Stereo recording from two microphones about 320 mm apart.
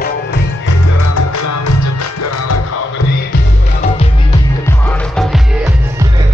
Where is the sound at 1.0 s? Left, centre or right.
Left.